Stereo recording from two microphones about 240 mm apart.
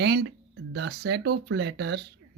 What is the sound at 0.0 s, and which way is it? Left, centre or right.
A woman's voice, right.